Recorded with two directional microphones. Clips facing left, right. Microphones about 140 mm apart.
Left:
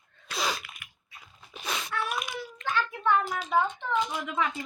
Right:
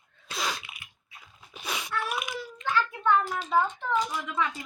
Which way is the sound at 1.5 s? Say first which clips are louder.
Even; 10° right (ahead or behind).